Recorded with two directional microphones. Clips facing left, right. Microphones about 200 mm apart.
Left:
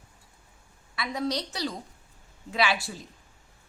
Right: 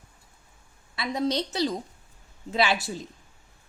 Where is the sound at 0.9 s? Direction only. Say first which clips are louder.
Right 3 dB; 25° right (ahead or behind).